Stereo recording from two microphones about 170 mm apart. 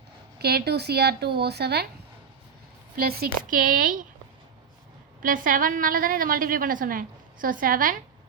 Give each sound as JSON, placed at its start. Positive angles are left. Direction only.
{"t": 0.3, "sound": "speech", "side_deg": -70}
{"t": 2.9, "sound": "a woman's voice", "side_deg": -65}
{"t": 5.2, "sound": "a woman's voice", "side_deg": -55}